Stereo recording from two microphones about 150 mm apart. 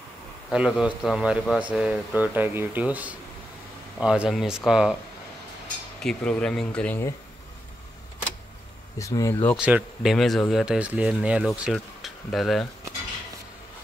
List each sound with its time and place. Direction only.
0.5 s speech: 5° right (ahead or behind)
6.0 s speech: 5° left (ahead or behind)
8.9 s speech: 20° left (ahead or behind)
9.6 s speech: 10° right (ahead or behind)